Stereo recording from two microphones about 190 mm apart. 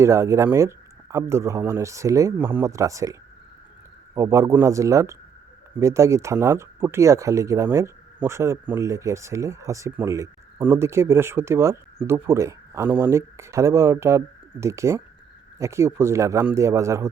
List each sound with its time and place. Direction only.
0.0 s speech: 15° right (ahead or behind)